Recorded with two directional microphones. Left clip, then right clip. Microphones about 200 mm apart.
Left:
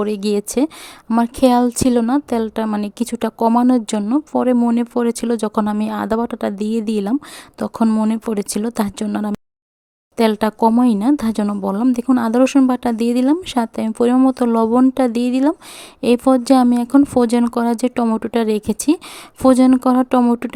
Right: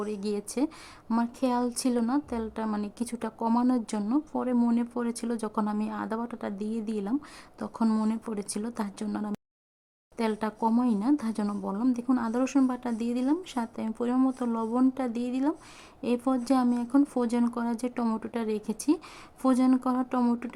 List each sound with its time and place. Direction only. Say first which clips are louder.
0.0 s a woman's voice: left 13 dB; 40° left (ahead or behind)
8.1 s a woman's voice: left 13 dB; 40° left (ahead or behind)